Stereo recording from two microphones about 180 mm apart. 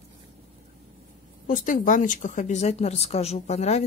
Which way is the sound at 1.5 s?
45° left (ahead or behind).